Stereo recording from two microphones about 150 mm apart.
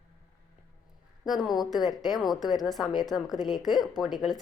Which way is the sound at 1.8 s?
25° left (ahead or behind).